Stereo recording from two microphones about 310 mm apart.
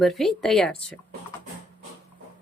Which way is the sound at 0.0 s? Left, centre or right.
Centre.